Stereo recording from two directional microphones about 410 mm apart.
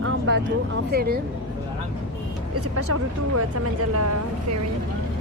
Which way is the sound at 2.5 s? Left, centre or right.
Right.